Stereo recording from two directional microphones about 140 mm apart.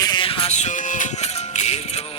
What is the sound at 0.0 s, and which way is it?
Music, 35° left (ahead or behind).